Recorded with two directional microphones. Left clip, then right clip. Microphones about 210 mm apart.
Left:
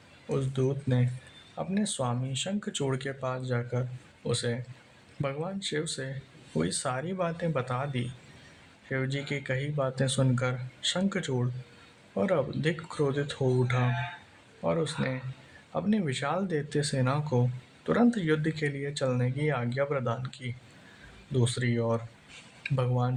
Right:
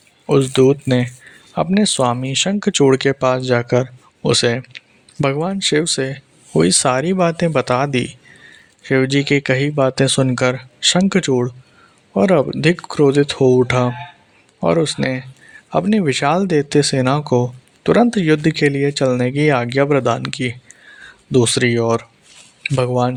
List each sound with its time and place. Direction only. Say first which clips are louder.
0.3 s speech: right 18 dB; 40° right (ahead or behind)